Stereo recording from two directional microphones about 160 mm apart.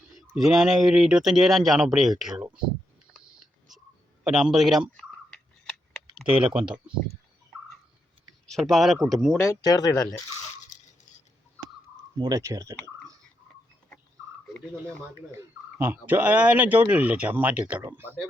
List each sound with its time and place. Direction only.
0.2 s speech: centre (ahead or behind)
4.2 s speech: centre (ahead or behind)
8.4 s speech: centre (ahead or behind)
9.4 s speech: 20° left (ahead or behind)
12.1 s speech: 25° right (ahead or behind)
15.3 s speech: 15° right (ahead or behind)